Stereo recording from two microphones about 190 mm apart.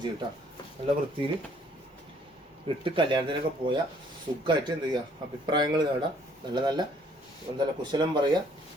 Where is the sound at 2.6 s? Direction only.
25° right (ahead or behind).